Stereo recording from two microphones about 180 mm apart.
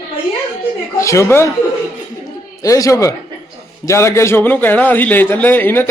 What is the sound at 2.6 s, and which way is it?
A man's voice, 20° left (ahead or behind).